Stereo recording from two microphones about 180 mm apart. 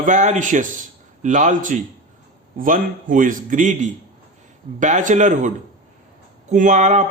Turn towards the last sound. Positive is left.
turn(degrees=-40)  # may be behind; listen again after turning